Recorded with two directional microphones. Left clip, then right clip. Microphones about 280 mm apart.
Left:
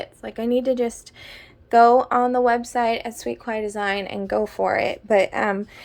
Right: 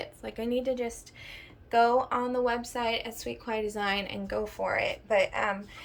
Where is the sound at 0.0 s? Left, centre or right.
Centre.